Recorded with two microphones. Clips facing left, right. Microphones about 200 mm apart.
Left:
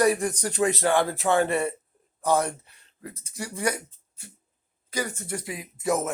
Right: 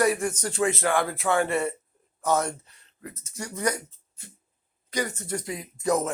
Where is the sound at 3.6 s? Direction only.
10° left (ahead or behind).